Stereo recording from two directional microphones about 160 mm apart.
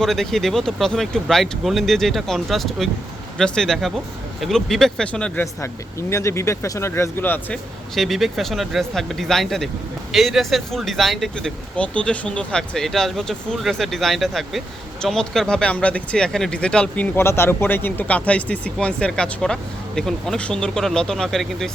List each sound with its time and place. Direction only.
0.0 s speech: centre (ahead or behind)
5.5 s speech: 15° left (ahead or behind)
7.9 s speech: centre (ahead or behind)